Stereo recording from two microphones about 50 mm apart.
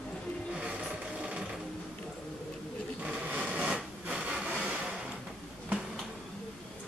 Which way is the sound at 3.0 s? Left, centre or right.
Right.